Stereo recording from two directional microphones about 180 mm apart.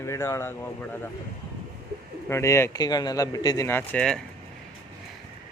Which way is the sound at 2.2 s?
15° left (ahead or behind).